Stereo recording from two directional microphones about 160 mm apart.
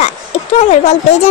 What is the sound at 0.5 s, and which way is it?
Speech, 45° left (ahead or behind).